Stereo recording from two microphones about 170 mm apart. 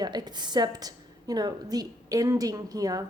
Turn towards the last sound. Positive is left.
turn(degrees=-20)  # may be behind; listen again after turning